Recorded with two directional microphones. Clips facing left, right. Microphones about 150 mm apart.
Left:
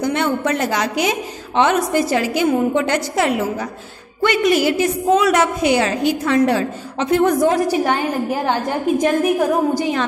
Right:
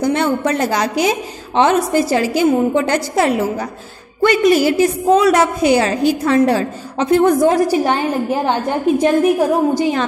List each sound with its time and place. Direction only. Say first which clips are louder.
0.0 s a woman's voice: right 3 dB; 35° right (ahead or behind)